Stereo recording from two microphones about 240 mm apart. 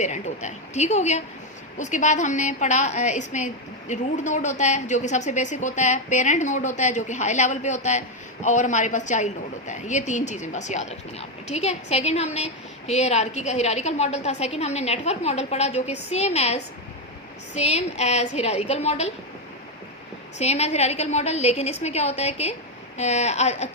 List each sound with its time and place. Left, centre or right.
0.0 s a woman's voice: left
20.4 s a woman's voice: left